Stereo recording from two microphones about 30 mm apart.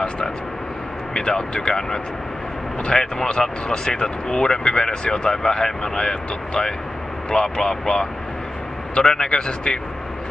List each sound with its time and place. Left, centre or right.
1.1 s a man's voice: left